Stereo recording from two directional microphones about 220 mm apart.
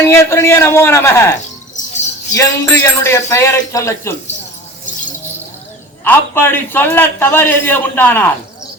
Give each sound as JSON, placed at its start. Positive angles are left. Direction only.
{"t": 0.1, "sound": "a man's voice", "side_deg": 10}
{"t": 6.1, "sound": "a man's voice", "side_deg": 10}